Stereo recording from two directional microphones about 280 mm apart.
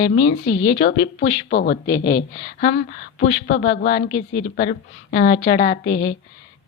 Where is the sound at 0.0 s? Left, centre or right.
Left.